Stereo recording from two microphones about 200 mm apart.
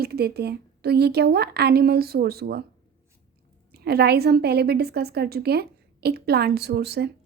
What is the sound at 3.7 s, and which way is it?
Speech, 55° right (ahead or behind).